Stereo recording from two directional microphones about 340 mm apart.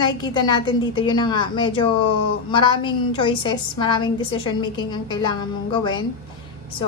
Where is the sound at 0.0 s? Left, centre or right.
Centre.